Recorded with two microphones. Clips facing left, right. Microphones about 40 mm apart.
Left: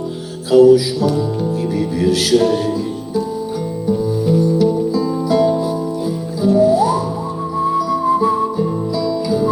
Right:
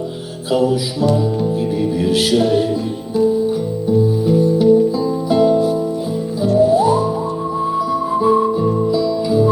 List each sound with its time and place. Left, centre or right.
0.5 s music: centre
1.8 s music: centre
4.4 s music: centre
8.0 s music: centre